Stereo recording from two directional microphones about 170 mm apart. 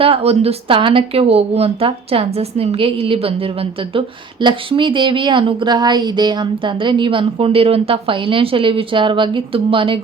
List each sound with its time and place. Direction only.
0.0 s a woman's voice: 35° right (ahead or behind)